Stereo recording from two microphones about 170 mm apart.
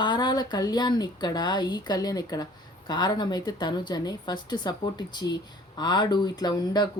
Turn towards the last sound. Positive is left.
turn(degrees=25)  # may be behind; listen again after turning